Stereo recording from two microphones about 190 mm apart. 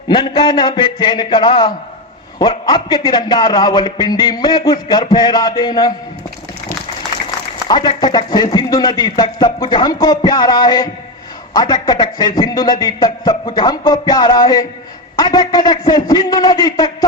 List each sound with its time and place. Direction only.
0.1 s a man's voice: 25° left (ahead or behind)
7.7 s a man's voice: 25° left (ahead or behind)